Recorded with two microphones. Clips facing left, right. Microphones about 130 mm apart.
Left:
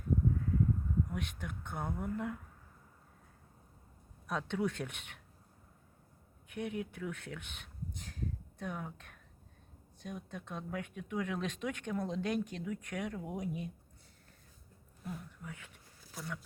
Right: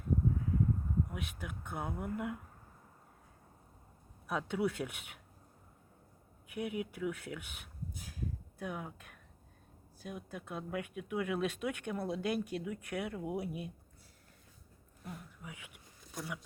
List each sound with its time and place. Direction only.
1.1 s speech: 5° right (ahead or behind)
4.3 s speech: 10° right (ahead or behind)
6.5 s speech: 5° right (ahead or behind)
15.0 s speech: centre (ahead or behind)